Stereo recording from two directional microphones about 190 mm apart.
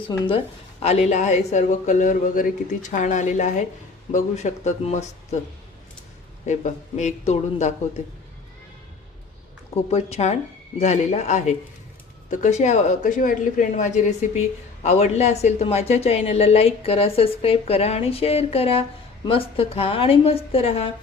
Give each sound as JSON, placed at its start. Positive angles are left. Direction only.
{"t": 0.1, "sound": "a woman's voice", "side_deg": 30}
{"t": 6.4, "sound": "a woman's voice", "side_deg": 40}
{"t": 9.9, "sound": "a woman's voice", "side_deg": 35}